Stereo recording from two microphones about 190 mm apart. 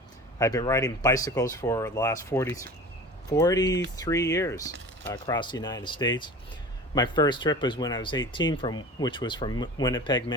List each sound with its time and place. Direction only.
0.3 s speech: 20° left (ahead or behind)